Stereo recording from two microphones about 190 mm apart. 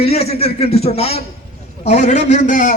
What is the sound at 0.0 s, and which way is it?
A man's voice, 35° left (ahead or behind).